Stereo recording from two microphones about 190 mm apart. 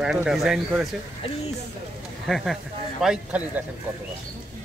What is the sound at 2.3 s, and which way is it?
Speech, centre (ahead or behind).